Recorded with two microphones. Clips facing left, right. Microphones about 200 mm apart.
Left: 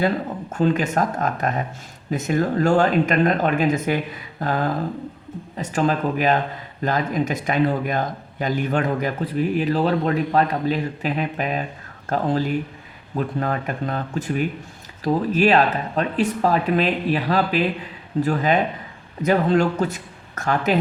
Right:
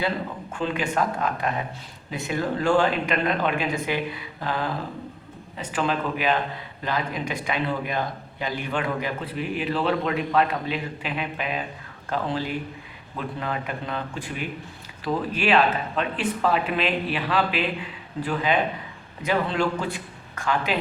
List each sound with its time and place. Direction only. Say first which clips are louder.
0.5 s speech: left 6 dB; 45° left (ahead or behind)